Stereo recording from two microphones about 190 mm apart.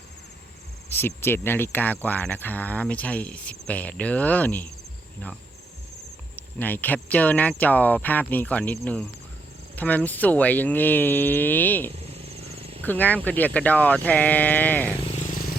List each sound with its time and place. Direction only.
0.9 s speech: 10° left (ahead or behind)
11.9 s a sound: 30° right (ahead or behind)
12.8 s speech: 10° left (ahead or behind)
15.0 s vehicle: 35° left (ahead or behind)